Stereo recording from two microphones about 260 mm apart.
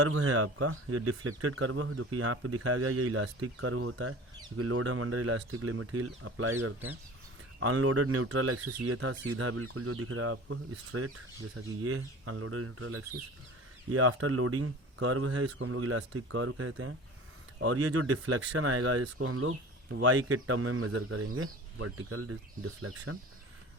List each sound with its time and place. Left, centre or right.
0.0 s speech: right